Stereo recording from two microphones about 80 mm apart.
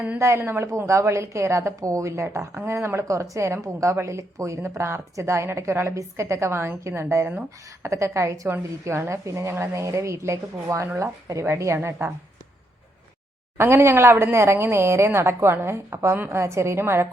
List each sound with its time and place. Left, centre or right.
0.2 s a woman's voice: right
13.6 s a woman's voice: right